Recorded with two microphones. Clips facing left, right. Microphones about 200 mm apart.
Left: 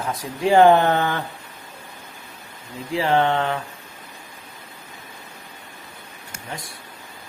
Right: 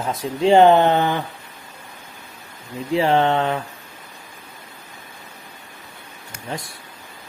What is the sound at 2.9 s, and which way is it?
Speech, 25° right (ahead or behind).